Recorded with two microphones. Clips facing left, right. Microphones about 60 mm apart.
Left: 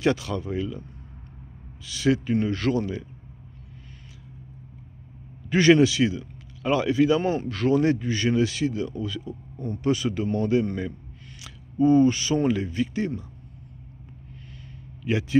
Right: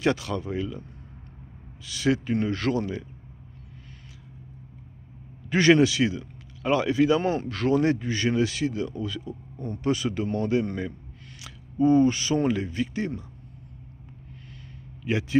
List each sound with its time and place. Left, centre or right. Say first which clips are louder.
0.0 s speech: left 1 dB; right
1.8 s speech: left 2 dB; right
5.5 s a man's voice: left 1 dB; right
7.2 s speech: left 1 dB; right
12.1 s speech: left 1 dB; right
12.4 s speech: left 2 dB; right
15.0 s a man's voice: left 1 dB; right